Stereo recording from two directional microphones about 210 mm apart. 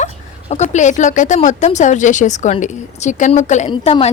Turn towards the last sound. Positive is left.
turn(degrees=30)  # may be behind; listen again after turning